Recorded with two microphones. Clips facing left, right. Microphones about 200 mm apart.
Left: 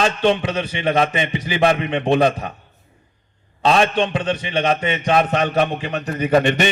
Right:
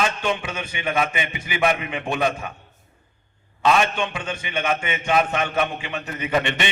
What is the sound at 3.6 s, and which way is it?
A man's voice, 35° left (ahead or behind).